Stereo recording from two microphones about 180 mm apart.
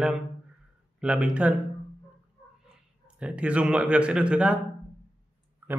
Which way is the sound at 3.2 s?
5° right (ahead or behind).